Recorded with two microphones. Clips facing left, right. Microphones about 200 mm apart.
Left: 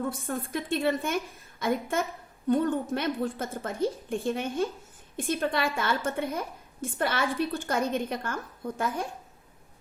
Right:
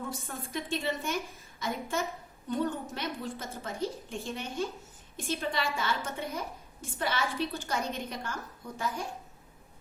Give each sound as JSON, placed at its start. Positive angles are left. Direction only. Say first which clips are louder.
{"t": 0.1, "sound": "a woman's voice", "louder": "left 6 dB", "side_deg": 55}